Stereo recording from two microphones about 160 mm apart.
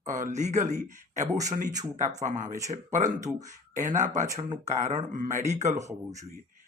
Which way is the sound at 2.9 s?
50° right (ahead or behind).